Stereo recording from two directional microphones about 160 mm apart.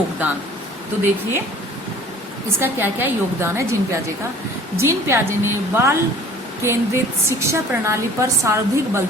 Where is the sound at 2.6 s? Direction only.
15° right (ahead or behind).